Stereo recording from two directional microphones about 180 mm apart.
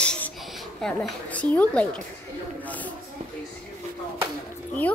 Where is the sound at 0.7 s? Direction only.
5° left (ahead or behind).